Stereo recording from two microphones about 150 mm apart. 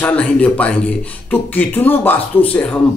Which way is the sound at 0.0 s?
10° left (ahead or behind).